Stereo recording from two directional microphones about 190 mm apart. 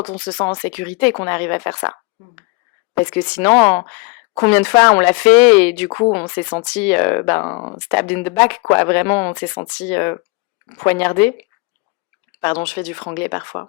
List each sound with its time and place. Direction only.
0.0 s speech: 25° left (ahead or behind)
3.2 s speech: 5° left (ahead or behind)
5.9 s speech: 20° left (ahead or behind)
7.4 s speech: 25° left (ahead or behind)
7.9 s speech: 10° left (ahead or behind)
12.6 s speech: 10° left (ahead or behind)